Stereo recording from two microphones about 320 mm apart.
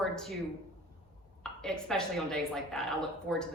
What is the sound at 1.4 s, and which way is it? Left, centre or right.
A woman's voice, centre.